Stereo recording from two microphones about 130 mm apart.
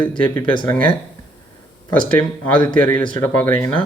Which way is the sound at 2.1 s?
10° left (ahead or behind).